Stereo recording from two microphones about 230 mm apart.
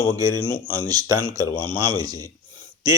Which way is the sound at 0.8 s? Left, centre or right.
Centre.